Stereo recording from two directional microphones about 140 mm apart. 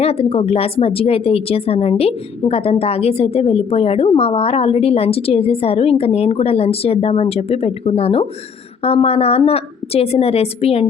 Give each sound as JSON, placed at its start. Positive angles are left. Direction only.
{"t": 0.0, "sound": "a woman's voice", "side_deg": 45}